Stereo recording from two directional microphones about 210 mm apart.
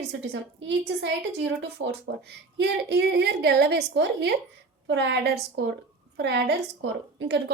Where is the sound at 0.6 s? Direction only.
55° right (ahead or behind).